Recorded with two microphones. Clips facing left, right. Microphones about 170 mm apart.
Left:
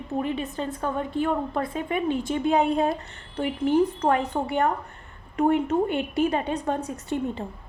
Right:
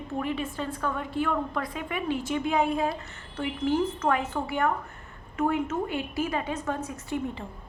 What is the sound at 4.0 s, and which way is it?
Speech, 35° left (ahead or behind).